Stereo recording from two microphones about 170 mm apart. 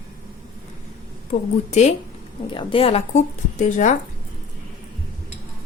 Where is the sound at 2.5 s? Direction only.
30° left (ahead or behind).